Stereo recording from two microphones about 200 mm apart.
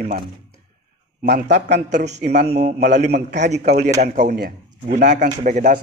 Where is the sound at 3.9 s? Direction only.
45° right (ahead or behind).